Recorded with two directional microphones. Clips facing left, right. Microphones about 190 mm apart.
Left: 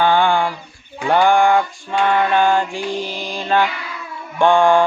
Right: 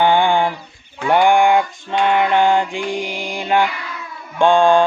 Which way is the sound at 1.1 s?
15° right (ahead or behind).